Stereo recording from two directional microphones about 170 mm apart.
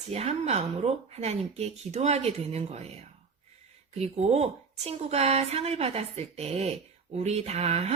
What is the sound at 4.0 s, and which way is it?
Speech, 40° right (ahead or behind).